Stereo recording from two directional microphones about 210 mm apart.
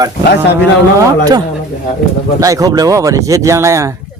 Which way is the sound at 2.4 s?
15° right (ahead or behind).